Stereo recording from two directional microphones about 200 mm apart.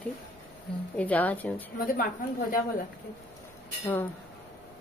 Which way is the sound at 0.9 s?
5° left (ahead or behind).